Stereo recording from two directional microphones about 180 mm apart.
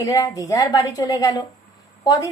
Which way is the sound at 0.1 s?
20° left (ahead or behind).